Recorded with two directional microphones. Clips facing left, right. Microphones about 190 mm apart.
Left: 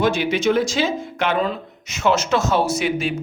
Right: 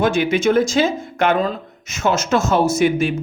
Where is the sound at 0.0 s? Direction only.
50° right (ahead or behind).